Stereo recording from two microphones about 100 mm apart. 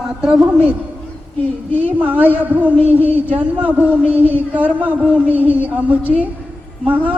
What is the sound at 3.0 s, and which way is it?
Speech, 20° left (ahead or behind).